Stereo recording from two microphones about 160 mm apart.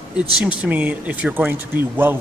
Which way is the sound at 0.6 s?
10° right (ahead or behind).